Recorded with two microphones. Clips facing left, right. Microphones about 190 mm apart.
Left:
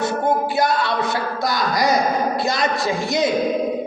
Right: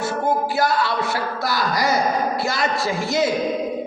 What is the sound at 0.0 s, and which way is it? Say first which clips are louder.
Music: left 2 dB; 20° left (ahead or behind).